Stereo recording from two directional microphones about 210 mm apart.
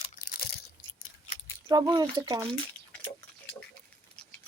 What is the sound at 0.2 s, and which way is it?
Crunch, 45° left (ahead or behind).